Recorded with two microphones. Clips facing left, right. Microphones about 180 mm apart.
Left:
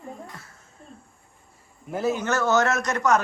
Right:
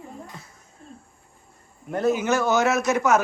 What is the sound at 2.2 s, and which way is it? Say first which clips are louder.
Speech: right 1 dB; 15° right (ahead or behind).